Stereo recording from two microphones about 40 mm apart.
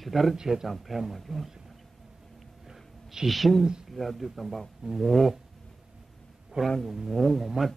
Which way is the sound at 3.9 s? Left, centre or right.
Centre.